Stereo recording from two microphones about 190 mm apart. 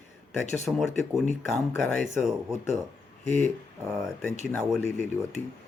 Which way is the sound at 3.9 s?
Centre (ahead or behind).